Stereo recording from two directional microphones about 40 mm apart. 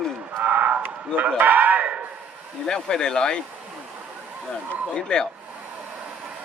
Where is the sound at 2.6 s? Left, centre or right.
Centre.